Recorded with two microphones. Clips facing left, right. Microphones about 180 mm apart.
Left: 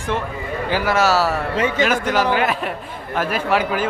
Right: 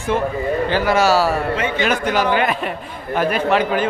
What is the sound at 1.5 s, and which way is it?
Speech, 40° left (ahead or behind).